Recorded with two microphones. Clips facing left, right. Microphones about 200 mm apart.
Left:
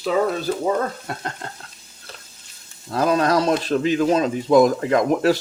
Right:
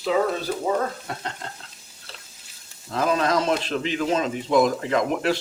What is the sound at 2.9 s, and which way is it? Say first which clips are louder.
Speech: left 4 dB; 40° left (ahead or behind).